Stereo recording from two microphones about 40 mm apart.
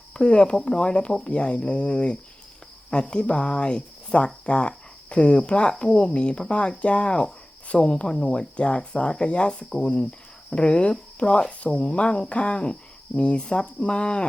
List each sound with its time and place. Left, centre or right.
0.1 s speech: left
9.6 s speech: centre
10.0 s speech: left